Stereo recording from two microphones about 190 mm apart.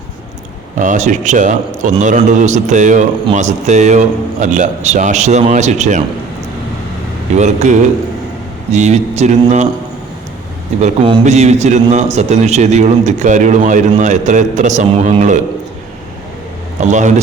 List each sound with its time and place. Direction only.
0.8 s a man's voice: 40° right (ahead or behind)
7.3 s a man's voice: 40° right (ahead or behind)
10.8 s a man's voice: 35° right (ahead or behind)
16.9 s a man's voice: 40° right (ahead or behind)